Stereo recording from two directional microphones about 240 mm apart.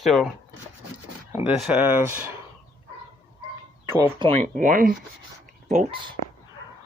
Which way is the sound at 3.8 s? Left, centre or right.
Centre.